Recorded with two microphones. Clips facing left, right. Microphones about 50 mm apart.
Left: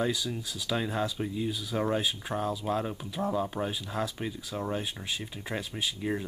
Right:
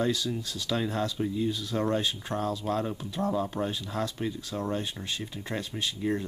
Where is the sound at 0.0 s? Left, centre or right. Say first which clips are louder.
Right 2 dB; centre.